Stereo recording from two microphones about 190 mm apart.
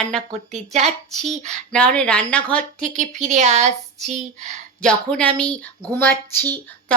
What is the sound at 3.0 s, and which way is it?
A woman's voice, 35° right (ahead or behind).